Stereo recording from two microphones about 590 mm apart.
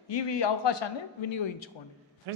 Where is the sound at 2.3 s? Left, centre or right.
Right.